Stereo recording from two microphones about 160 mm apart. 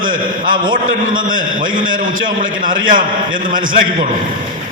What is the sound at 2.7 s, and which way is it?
Speech, 55° right (ahead or behind).